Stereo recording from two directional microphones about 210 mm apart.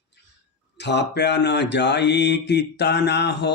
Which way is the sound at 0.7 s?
55° left (ahead or behind).